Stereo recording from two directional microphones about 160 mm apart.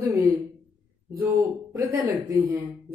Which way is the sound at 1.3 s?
20° right (ahead or behind).